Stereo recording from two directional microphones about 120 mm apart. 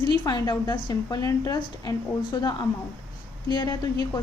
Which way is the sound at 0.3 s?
40° left (ahead or behind).